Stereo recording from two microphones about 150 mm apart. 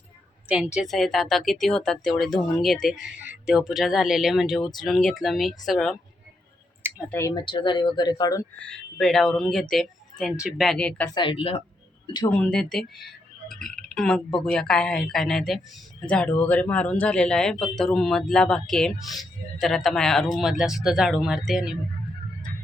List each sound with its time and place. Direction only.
0.4 s a woman's voice: 5° right (ahead or behind)
7.1 s speech: 20° left (ahead or behind)
7.3 s speech: 35° left (ahead or behind)
8.5 s a woman's voice: 5° left (ahead or behind)
11.1 s speech: 35° left (ahead or behind)
12.3 s a woman's voice: 5° left (ahead or behind)